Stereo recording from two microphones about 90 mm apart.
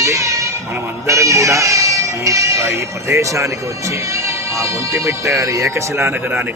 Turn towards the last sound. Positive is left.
turn(degrees=-30)  # may be behind; listen again after turning